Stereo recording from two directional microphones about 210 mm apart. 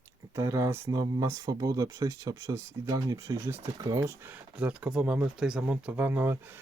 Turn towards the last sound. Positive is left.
turn(degrees=-10)  # may be behind; listen again after turning